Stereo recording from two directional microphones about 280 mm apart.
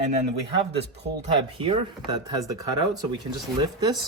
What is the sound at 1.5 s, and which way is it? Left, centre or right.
Speech, centre.